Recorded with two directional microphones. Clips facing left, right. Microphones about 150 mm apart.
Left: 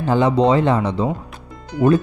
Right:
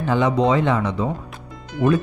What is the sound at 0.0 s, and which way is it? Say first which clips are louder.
Speech: left 3 dB; 35° left (ahead or behind).